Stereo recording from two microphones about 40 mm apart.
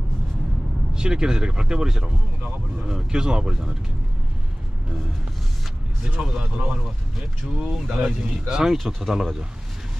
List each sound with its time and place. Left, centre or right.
0.9 s speech: centre
6.2 s speech: right
7.6 s speech: centre
8.0 s speech: centre
8.7 s speech: centre